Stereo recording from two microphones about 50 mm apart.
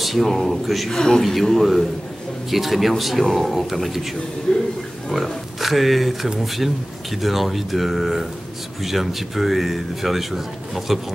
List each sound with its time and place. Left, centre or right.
0.0 s a man's voice: centre
4.5 s speech: left
5.1 s speech: centre